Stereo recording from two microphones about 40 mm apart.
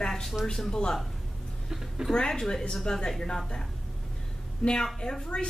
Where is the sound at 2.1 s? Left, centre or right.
Centre.